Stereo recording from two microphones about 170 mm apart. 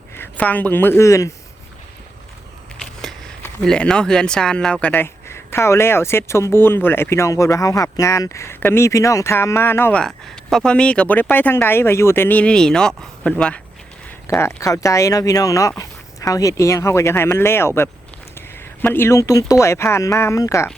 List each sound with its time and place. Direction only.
0.2 s speech: 10° left (ahead or behind)
3.0 s speech: centre (ahead or behind)
14.3 s speech: 15° left (ahead or behind)